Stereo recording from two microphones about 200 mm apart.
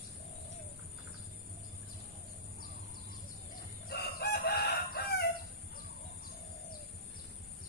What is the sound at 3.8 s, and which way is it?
Chicken, 55° left (ahead or behind).